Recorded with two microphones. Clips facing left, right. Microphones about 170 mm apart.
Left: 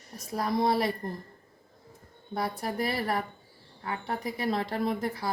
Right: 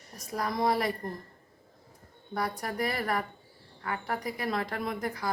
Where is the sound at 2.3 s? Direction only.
25° left (ahead or behind).